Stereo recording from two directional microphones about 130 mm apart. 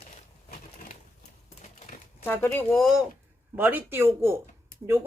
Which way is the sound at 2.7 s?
Centre (ahead or behind).